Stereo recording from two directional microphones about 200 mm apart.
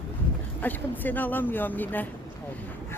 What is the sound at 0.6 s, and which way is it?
Speech, 10° left (ahead or behind).